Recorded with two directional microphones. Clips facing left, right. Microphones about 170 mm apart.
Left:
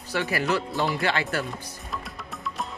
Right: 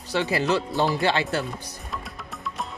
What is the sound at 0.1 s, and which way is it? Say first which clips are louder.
Speech: right 2 dB; 20° right (ahead or behind).